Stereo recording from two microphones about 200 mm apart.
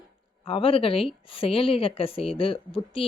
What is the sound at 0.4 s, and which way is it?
Speech, 30° left (ahead or behind).